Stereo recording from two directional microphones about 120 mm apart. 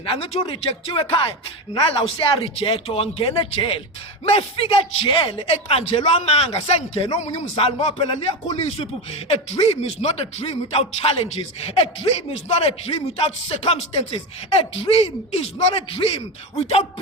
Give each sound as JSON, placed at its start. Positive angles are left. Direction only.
{"t": 0.0, "sound": "speech", "side_deg": 45}
{"t": 5.5, "sound": "speech", "side_deg": 55}
{"t": 7.9, "sound": "speech", "side_deg": 40}
{"t": 8.5, "sound": "speech", "side_deg": 55}